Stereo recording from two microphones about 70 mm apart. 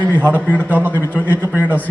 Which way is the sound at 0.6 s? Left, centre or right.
Right.